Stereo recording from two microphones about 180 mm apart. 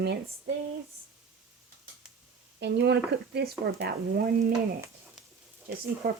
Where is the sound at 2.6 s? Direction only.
75° right (ahead or behind).